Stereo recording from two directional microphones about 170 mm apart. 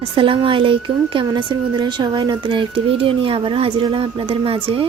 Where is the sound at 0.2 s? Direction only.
30° right (ahead or behind).